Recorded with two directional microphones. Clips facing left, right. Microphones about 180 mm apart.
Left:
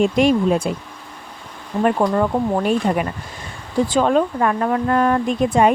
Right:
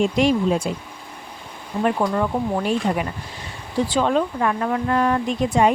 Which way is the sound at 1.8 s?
50° left (ahead or behind).